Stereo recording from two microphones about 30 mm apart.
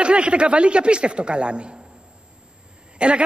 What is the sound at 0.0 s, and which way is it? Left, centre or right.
A man's voice, right.